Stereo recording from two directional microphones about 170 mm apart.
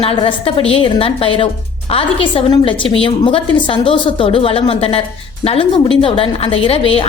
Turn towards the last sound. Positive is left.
turn(degrees=35)  # may be behind; listen again after turning